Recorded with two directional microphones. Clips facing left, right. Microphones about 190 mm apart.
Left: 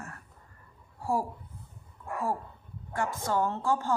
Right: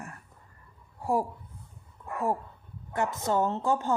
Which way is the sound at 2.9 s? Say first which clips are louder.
Right 2 dB; 20° right (ahead or behind).